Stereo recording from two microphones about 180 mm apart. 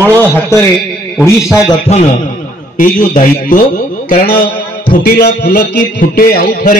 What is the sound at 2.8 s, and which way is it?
Speech, 50° left (ahead or behind).